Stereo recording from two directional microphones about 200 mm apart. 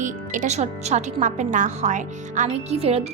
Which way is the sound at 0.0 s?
40° right (ahead or behind).